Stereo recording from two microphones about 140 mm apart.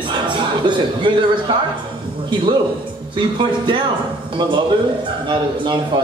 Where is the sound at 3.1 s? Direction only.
35° right (ahead or behind).